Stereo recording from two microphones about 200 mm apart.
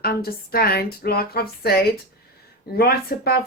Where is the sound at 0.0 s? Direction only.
50° left (ahead or behind).